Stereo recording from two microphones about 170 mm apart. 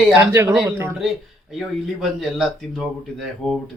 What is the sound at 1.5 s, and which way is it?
Speech, centre (ahead or behind).